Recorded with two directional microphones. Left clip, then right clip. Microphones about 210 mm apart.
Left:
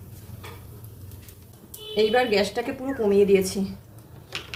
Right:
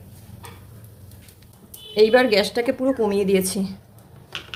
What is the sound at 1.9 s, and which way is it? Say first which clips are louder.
A woman's voice: right 5 dB; 50° right (ahead or behind).